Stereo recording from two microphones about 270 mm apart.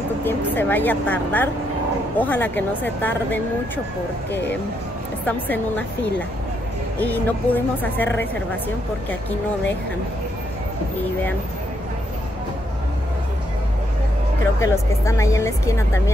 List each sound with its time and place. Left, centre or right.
0.2 s speech: centre
4.3 s speech: left
5.2 s a woman's voice: centre
14.6 s speech: centre